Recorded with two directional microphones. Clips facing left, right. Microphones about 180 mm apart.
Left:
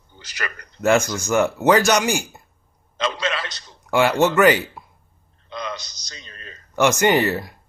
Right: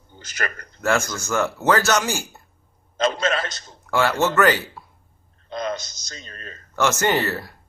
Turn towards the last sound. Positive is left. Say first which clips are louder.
# left 4 dB
turn(degrees=15)  # may be behind; listen again after turning